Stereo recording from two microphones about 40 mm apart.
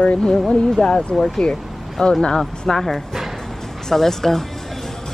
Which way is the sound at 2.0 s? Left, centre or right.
Centre.